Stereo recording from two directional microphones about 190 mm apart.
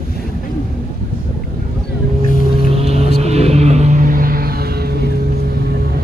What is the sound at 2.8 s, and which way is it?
Vehicle, 35° right (ahead or behind).